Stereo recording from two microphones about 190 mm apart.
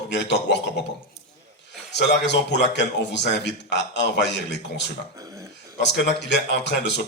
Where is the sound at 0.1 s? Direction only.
60° left (ahead or behind).